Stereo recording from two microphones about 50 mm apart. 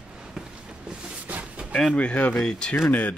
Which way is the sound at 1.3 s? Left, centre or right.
Right.